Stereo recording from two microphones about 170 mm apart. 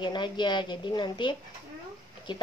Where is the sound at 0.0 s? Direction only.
25° left (ahead or behind).